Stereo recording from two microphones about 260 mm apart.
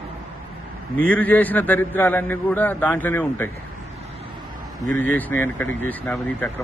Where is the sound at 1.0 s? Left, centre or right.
Centre.